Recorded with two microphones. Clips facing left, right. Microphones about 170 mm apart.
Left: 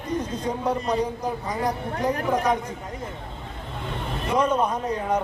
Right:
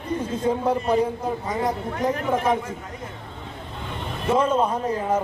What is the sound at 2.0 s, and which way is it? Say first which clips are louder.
Speech: even; 20° right (ahead or behind).